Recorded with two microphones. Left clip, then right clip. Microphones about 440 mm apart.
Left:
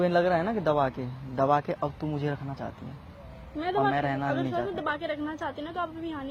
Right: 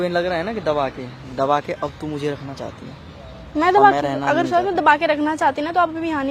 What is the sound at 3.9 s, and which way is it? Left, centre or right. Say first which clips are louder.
Speech: right 9 dB; left.